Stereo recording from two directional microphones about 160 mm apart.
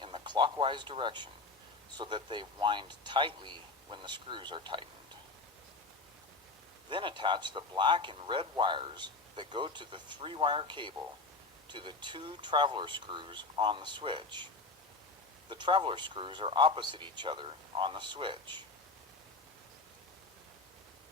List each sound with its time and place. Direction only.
0.0 s a man's voice: 30° right (ahead or behind)
6.9 s speech: 30° right (ahead or behind)
15.4 s speech: 30° right (ahead or behind)